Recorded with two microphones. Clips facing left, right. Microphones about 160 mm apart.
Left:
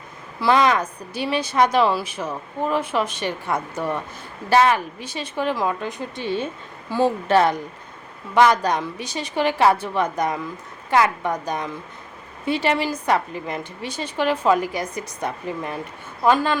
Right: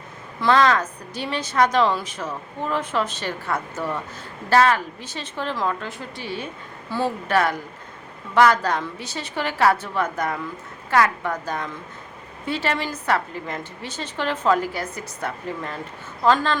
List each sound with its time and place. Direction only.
0.3 s a woman's voice: 10° left (ahead or behind)
7.3 s a woman's voice: 25° left (ahead or behind)